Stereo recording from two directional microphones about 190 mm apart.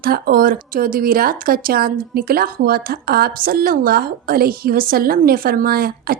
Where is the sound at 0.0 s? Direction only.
50° right (ahead or behind).